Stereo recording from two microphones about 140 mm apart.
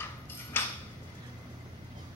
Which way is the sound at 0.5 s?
15° left (ahead or behind).